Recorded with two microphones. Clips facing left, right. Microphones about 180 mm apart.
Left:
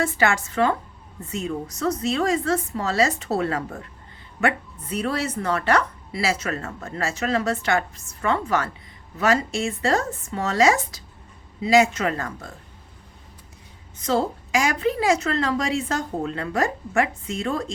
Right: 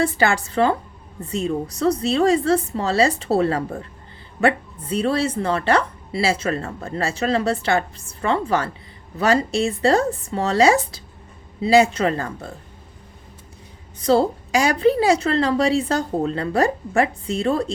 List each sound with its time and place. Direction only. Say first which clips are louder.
0.0 s speech: right 3 dB; 35° right (ahead or behind)
14.0 s speech: right 6 dB; 35° right (ahead or behind)